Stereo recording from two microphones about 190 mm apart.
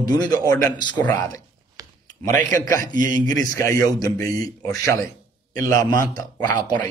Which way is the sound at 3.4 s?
15° left (ahead or behind).